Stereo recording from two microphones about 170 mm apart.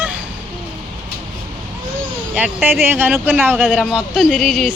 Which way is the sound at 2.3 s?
10° right (ahead or behind).